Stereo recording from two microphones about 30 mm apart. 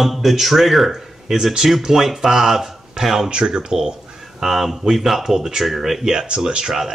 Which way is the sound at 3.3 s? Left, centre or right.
Right.